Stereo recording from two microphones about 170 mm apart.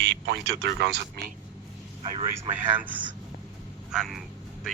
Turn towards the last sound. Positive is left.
turn(degrees=0)  # may be behind; listen again after turning